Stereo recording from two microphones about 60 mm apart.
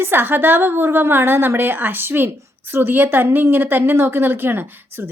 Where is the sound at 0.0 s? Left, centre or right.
Right.